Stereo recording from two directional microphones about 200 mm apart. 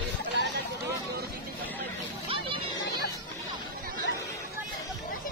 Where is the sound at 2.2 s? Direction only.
25° right (ahead or behind).